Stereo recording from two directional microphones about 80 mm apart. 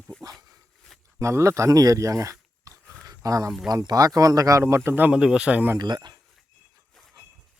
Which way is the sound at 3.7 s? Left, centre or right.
Right.